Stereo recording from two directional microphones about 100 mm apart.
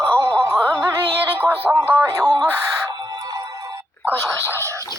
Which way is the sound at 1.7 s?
30° right (ahead or behind).